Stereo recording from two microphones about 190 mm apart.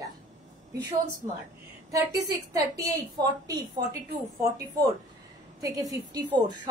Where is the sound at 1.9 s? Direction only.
20° right (ahead or behind).